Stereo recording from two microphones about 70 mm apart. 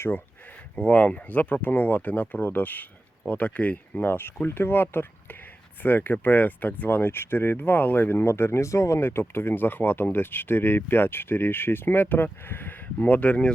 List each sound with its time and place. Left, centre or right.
0.8 s speech: left